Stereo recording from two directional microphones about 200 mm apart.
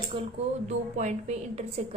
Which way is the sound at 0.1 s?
30° right (ahead or behind).